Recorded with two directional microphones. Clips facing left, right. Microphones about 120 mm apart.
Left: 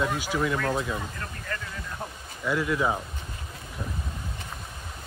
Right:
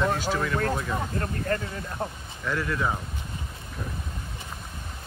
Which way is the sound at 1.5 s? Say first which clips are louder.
Right 8 dB; 40° right (ahead or behind).